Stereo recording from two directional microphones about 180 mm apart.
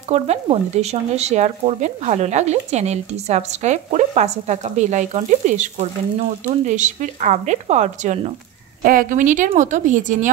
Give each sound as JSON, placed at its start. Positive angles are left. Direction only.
{"t": 0.1, "sound": "speech", "side_deg": -35}